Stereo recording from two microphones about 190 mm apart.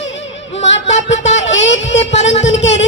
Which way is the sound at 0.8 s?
35° left (ahead or behind).